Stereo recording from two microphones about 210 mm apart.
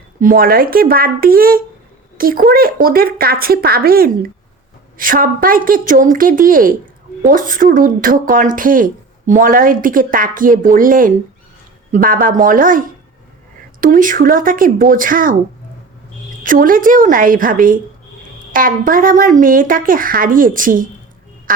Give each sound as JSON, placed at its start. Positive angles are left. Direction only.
{"t": 0.2, "sound": "speech", "side_deg": -45}
{"t": 13.8, "sound": "speech", "side_deg": -40}
{"t": 16.4, "sound": "speech", "side_deg": -40}